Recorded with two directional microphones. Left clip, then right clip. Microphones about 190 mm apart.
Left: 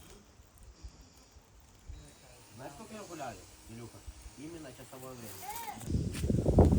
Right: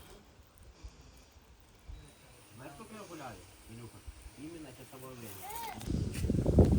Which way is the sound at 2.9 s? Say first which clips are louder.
Left 4 dB; 55° left (ahead or behind).